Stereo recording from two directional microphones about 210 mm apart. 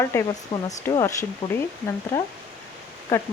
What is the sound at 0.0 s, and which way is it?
Speech, 15° left (ahead or behind).